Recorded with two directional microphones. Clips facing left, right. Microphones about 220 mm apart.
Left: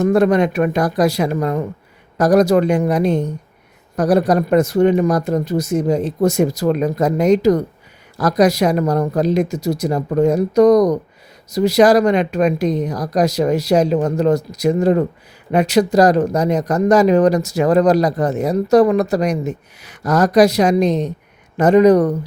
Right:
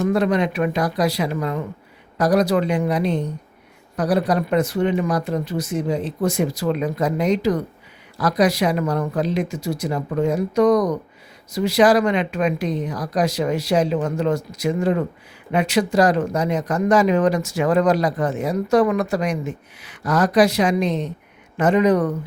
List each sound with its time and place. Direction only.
0.0 s speech: 45° left (ahead or behind)